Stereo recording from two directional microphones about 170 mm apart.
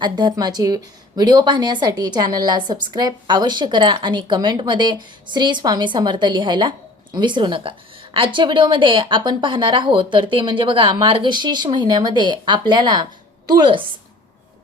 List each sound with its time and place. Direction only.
0.0 s speech: 25° right (ahead or behind)